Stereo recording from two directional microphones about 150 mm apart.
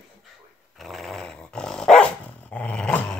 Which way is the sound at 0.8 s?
Centre (ahead or behind).